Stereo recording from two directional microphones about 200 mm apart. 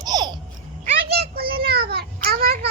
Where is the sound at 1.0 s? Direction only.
55° right (ahead or behind).